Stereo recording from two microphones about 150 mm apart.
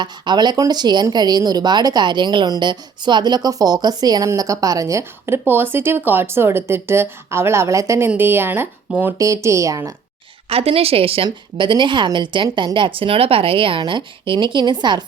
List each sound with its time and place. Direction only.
0.0 s speech: 30° right (ahead or behind)
10.5 s speech: 40° right (ahead or behind)